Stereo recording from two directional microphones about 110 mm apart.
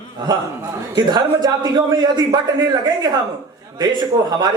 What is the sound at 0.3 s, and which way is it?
A man's voice, 40° right (ahead or behind).